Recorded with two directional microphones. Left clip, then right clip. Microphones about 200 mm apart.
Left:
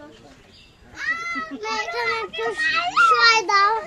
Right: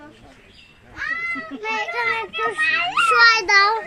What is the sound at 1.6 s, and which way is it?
Speech, 25° left (ahead or behind).